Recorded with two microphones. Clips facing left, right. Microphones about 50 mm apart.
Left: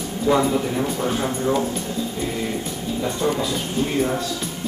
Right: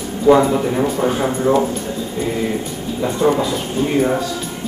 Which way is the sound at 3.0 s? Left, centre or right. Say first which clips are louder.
Right 7 dB; centre.